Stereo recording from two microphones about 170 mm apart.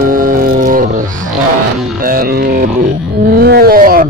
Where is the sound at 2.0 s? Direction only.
60° right (ahead or behind).